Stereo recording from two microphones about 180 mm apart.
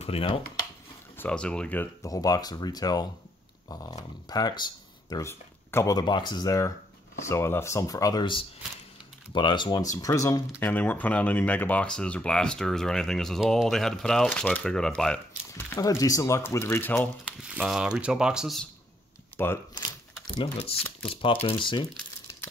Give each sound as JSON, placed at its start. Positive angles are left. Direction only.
{"t": 0.0, "sound": "speech", "side_deg": 30}
{"t": 1.1, "sound": "speech", "side_deg": 10}
{"t": 15.7, "sound": "speech", "side_deg": 15}
{"t": 17.2, "sound": "speech", "side_deg": -5}
{"t": 19.3, "sound": "speech", "side_deg": 10}
{"t": 19.7, "sound": "crumpling", "side_deg": 25}
{"t": 21.1, "sound": "speech", "side_deg": 30}